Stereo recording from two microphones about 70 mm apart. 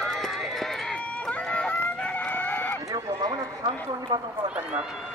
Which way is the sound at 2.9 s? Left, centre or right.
Right.